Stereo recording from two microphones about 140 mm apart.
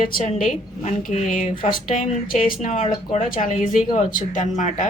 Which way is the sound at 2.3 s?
75° left (ahead or behind).